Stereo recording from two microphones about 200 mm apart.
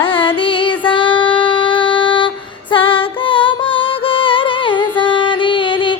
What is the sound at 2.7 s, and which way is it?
Music, 25° left (ahead or behind).